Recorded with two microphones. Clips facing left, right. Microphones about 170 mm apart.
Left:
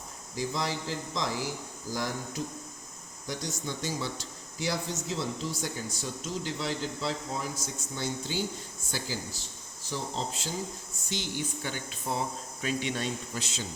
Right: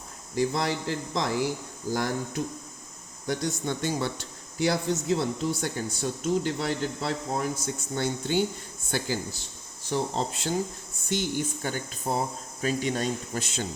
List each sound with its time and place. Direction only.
0.3 s speech: 60° right (ahead or behind)
11.1 s speech: 50° right (ahead or behind)